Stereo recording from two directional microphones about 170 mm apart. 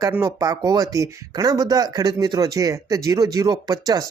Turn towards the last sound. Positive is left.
turn(degrees=-20)  # may be behind; listen again after turning